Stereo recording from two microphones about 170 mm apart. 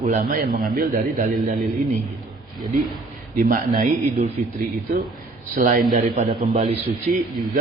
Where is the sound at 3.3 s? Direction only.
50° right (ahead or behind).